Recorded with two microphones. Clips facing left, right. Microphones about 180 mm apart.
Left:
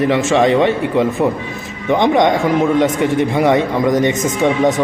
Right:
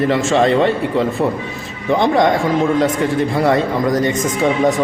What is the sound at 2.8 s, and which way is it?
Speech, 20° left (ahead or behind).